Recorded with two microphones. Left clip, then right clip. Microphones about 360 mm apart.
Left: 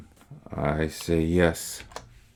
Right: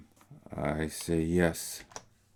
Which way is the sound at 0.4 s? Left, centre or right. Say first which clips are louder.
Left 6 dB; right.